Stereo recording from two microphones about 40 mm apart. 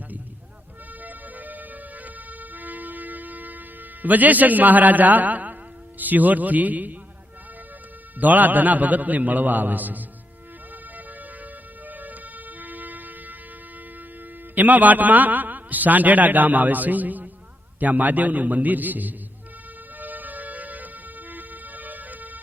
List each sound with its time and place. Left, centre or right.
1.0 s music: right
4.0 s a man's voice: right
8.2 s a man's voice: right
11.9 s music: right
14.5 s a man's voice: right
20.0 s siren: right